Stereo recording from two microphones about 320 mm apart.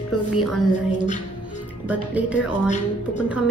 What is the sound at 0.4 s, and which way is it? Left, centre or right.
Speech, centre.